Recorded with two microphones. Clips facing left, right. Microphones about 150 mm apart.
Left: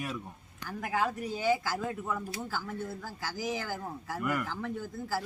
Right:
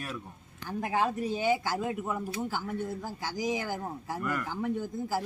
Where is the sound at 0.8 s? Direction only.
25° right (ahead or behind).